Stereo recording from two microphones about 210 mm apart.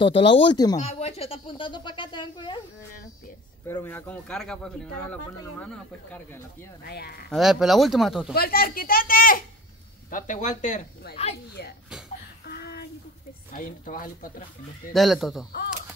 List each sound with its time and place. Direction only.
0.0 s speech: 25° left (ahead or behind)
0.7 s speech: 30° left (ahead or behind)
3.6 s speech: 10° left (ahead or behind)
5.6 s speech: 5° left (ahead or behind)
6.8 s speech: 50° left (ahead or behind)
7.2 s speech: centre (ahead or behind)
8.4 s speech: 45° left (ahead or behind)
12.4 s a sound: 50° left (ahead or behind)
13.5 s speech: 40° left (ahead or behind)
14.9 s speech: centre (ahead or behind)